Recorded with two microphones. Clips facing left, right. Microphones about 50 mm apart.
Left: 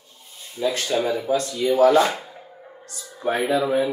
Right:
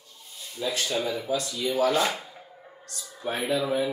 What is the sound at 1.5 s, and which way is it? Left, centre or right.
Speech, centre.